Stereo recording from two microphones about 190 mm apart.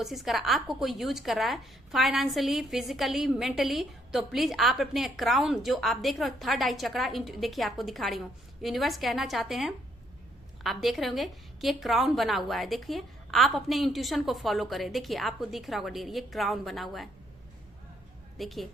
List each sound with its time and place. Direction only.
0.0 s a woman's voice: centre (ahead or behind)
18.3 s a woman's voice: centre (ahead or behind)